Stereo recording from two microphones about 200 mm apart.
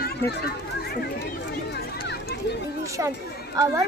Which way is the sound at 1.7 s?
55° left (ahead or behind).